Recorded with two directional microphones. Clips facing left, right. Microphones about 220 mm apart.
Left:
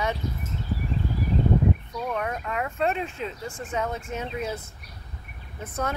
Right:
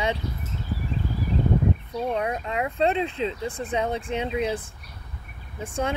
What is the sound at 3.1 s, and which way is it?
Speech, 35° right (ahead or behind).